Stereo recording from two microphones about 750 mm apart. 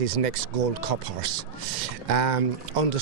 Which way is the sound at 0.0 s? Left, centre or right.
Right.